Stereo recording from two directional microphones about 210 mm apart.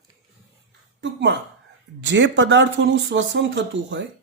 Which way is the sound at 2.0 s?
60° right (ahead or behind).